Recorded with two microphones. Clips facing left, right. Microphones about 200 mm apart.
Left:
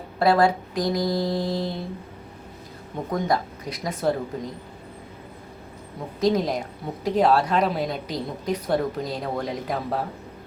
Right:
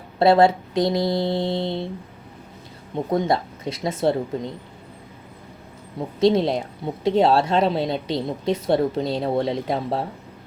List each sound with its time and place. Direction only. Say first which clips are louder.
0.2 s a woman's voice: right 4 dB; 25° right (ahead or behind)
3.1 s a woman's voice: right 3 dB; 30° right (ahead or behind)
6.1 s a woman's voice: right 4 dB; 30° right (ahead or behind)